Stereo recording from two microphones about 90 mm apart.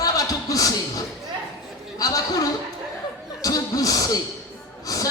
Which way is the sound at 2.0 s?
40° left (ahead or behind).